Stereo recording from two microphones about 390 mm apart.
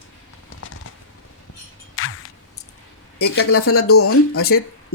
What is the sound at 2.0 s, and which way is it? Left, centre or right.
Music, left.